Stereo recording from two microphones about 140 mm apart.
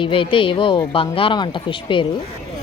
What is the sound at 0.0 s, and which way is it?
A woman's voice, 40° left (ahead or behind).